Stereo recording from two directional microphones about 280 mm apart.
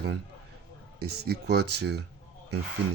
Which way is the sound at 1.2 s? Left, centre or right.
Right.